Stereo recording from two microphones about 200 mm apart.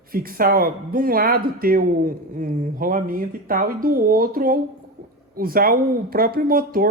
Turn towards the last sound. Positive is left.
turn(degrees=-45)  # may be behind; listen again after turning